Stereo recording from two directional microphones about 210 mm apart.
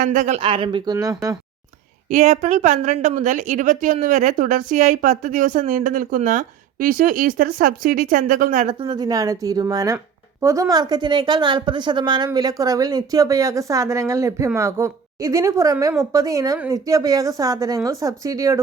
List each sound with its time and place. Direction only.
0.0 s speech: 35° right (ahead or behind); by 1.4 s 15° right (ahead or behind)
2.0 s a woman's voice: 35° right (ahead or behind); by 18.6 s 15° right (ahead or behind)